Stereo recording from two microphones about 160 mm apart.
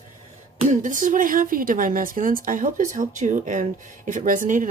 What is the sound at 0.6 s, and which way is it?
A woman's voice, 55° right (ahead or behind).